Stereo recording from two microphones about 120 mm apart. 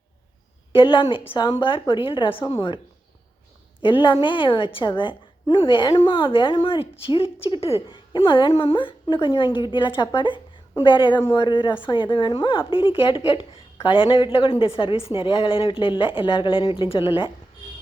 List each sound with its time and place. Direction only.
0.7 s a woman's voice: 45° left (ahead or behind)
2.4 s a woman's voice: 35° left (ahead or behind)
3.8 s a woman's voice: 45° left (ahead or behind)